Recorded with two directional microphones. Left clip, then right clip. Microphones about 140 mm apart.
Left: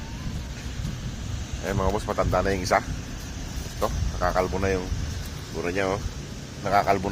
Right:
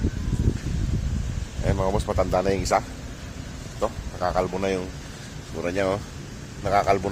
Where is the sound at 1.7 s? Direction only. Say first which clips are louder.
Right 1 dB; 20° right (ahead or behind).